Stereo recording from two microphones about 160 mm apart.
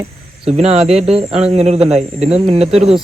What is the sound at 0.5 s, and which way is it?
Speech, 40° right (ahead or behind).